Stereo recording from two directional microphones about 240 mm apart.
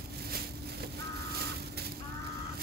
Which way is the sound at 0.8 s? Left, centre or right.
Right.